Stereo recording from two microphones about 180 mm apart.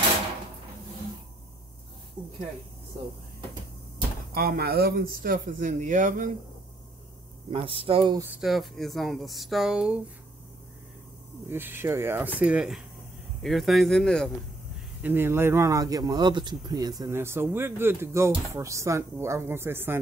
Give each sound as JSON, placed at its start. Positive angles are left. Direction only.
{"t": 4.3, "sound": "speech", "side_deg": -55}
{"t": 7.5, "sound": "speech", "side_deg": -30}
{"t": 8.2, "sound": "speech", "side_deg": -5}
{"t": 11.4, "sound": "speech", "side_deg": -10}
{"t": 15.0, "sound": "speech", "side_deg": -10}